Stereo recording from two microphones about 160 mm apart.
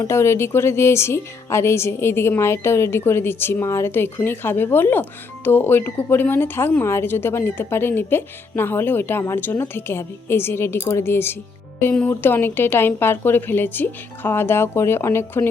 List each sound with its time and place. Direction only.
0.0 s speech: 15° left (ahead or behind)